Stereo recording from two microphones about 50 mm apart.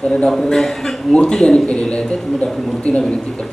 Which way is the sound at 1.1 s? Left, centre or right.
Centre.